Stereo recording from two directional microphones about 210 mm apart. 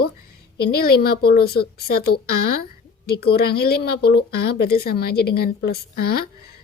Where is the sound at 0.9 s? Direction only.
50° left (ahead or behind).